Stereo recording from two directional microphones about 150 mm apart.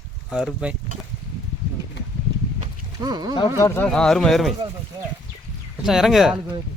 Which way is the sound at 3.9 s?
5° left (ahead or behind).